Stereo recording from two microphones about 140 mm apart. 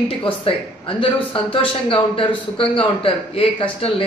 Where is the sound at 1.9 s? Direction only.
40° left (ahead or behind).